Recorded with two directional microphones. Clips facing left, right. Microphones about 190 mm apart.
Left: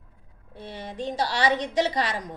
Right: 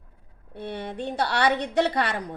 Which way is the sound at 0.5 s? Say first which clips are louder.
Right 4 dB; 60° right (ahead or behind).